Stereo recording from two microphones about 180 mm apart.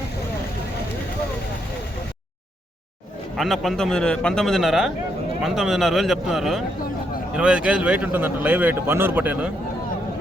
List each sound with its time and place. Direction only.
3.3 s a man's voice: centre (ahead or behind)